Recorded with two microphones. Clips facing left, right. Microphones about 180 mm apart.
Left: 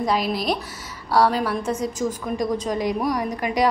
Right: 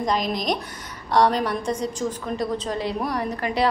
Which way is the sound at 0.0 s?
5° left (ahead or behind).